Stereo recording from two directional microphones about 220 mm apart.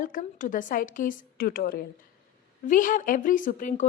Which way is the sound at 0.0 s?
40° left (ahead or behind).